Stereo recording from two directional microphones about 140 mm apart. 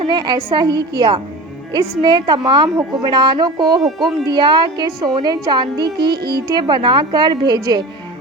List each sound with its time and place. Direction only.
0.0 s a woman's voice: 30° right (ahead or behind)